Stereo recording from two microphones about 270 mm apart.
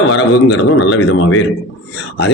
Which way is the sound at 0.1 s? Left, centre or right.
Left.